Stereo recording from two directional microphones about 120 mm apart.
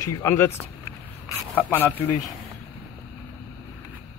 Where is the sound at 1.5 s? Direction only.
15° left (ahead or behind).